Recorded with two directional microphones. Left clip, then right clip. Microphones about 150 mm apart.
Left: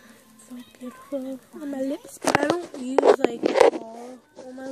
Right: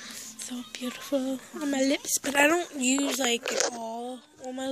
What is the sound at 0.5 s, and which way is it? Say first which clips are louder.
Speech: right 3 dB; 10° right (ahead or behind).